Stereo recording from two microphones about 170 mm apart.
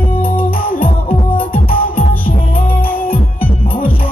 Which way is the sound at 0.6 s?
60° left (ahead or behind).